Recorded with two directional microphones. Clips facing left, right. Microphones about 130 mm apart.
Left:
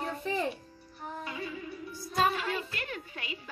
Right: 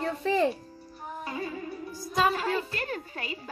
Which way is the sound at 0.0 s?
90° right.